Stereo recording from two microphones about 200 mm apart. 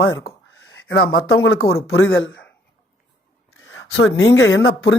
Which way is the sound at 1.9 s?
70° left (ahead or behind).